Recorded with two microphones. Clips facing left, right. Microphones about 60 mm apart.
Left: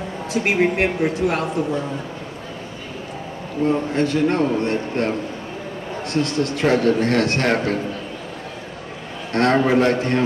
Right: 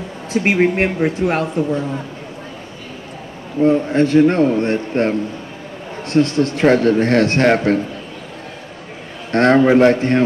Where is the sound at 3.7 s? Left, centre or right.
Right.